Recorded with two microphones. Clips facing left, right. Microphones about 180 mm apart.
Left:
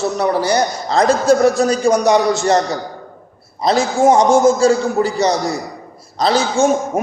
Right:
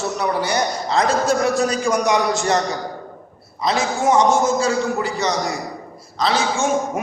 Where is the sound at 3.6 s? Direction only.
40° left (ahead or behind).